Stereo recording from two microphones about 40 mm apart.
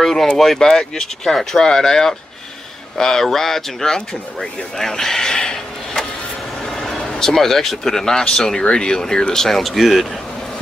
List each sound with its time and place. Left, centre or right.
0.0 s a sound: centre
0.3 s speech: centre
6.6 s vehicle: centre
7.1 s speech: centre
9.3 s speech: centre